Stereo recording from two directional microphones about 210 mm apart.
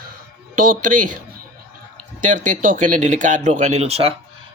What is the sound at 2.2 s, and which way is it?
Speech, 35° right (ahead or behind).